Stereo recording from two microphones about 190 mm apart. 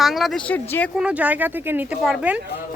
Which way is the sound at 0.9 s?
5° right (ahead or behind).